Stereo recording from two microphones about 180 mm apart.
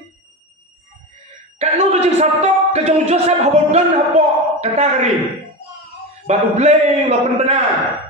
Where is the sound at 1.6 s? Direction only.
35° right (ahead or behind).